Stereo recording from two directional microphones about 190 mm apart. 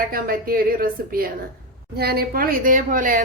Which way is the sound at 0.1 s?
50° right (ahead or behind).